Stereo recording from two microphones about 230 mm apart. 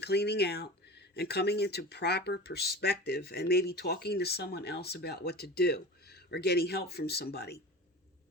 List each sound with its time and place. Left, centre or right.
0.0 s speech: left